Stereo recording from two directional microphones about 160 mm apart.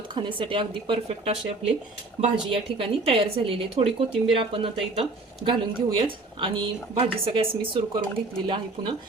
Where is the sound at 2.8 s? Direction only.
35° right (ahead or behind).